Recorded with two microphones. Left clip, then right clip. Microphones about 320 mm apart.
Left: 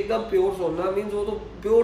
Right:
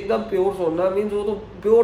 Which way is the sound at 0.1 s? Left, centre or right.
Centre.